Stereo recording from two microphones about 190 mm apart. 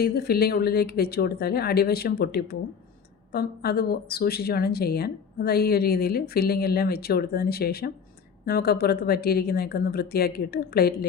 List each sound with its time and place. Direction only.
0.0 s speech: 55° left (ahead or behind)